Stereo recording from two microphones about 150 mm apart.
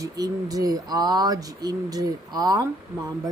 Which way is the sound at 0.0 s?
25° right (ahead or behind).